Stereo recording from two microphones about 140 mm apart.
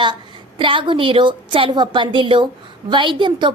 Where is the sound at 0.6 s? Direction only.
35° right (ahead or behind).